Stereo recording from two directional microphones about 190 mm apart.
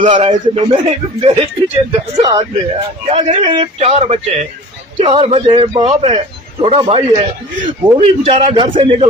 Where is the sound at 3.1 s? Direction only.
35° right (ahead or behind).